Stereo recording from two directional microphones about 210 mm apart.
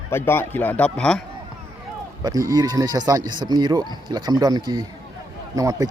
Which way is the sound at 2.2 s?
15° right (ahead or behind).